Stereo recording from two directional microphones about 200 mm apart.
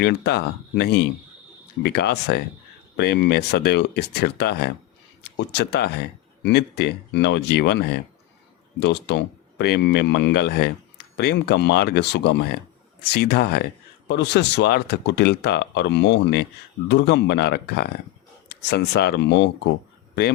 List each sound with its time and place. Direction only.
0.0 s speech: 55° left (ahead or behind)